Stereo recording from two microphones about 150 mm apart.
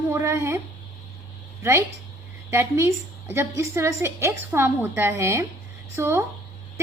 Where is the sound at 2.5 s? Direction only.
15° right (ahead or behind).